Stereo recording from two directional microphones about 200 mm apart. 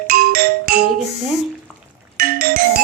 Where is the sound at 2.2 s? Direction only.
50° right (ahead or behind).